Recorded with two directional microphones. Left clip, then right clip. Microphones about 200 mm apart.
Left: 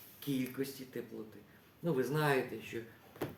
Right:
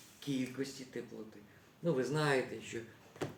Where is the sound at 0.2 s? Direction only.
20° left (ahead or behind).